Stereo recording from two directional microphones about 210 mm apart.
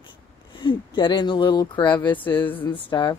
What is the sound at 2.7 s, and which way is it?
Speech, 25° left (ahead or behind).